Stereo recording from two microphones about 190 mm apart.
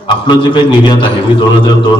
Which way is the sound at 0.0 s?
25° left (ahead or behind).